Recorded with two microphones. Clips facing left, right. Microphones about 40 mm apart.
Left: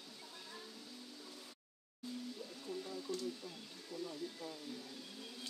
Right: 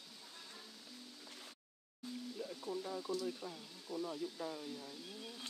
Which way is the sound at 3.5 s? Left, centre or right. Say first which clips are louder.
Right 3 dB; centre.